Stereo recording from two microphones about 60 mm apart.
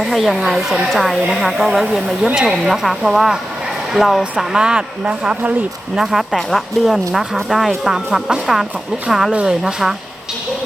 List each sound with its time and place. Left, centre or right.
0.0 s a woman's voice: centre
6.0 s a woman's voice: centre